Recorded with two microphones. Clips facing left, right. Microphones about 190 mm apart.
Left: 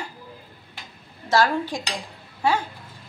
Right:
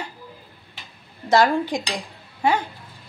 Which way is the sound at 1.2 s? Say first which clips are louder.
Right 3 dB; 15° right (ahead or behind).